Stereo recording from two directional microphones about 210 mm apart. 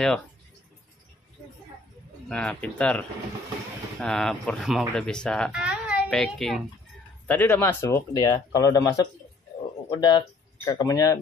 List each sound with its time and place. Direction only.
2.2 s speech: 5° left (ahead or behind)